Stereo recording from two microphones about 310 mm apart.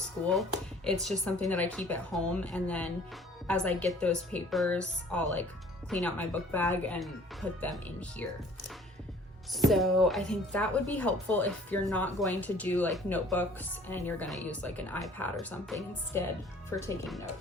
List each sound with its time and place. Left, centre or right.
1.0 s speech: centre
9.5 s speech: centre